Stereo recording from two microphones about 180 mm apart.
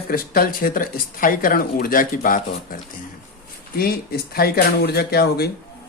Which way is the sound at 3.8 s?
60° left (ahead or behind).